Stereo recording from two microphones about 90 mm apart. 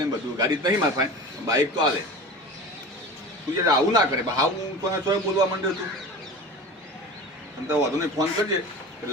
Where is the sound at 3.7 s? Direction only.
45° right (ahead or behind).